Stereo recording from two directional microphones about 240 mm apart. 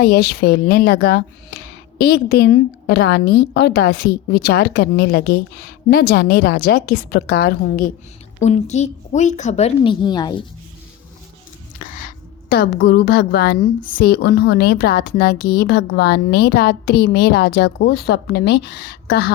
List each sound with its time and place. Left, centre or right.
0.0 s a woman's voice: left
8.4 s a woman's voice: left
11.8 s a woman's voice: left